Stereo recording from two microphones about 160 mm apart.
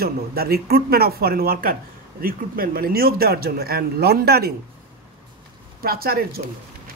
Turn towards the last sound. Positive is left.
turn(degrees=-70)  # may be behind; listen again after turning